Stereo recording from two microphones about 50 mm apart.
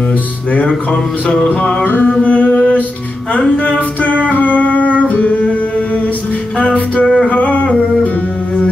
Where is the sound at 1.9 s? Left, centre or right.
Left.